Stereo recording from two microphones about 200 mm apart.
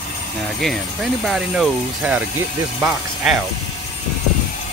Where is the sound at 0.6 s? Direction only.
Centre (ahead or behind).